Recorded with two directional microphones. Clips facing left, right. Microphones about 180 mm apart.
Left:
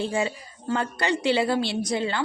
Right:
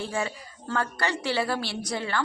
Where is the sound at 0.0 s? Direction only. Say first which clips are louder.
Left 4 dB; 20° left (ahead or behind).